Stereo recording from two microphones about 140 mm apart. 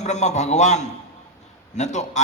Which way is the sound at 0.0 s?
55° left (ahead or behind).